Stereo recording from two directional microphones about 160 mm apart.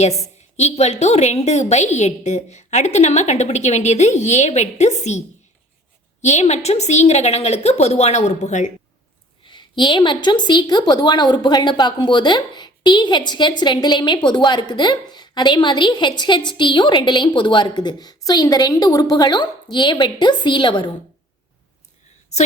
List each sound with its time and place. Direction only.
0.6 s a woman's voice: 45° left (ahead or behind)
6.2 s a woman's voice: 45° left (ahead or behind)
9.5 s a woman's voice: 30° left (ahead or behind)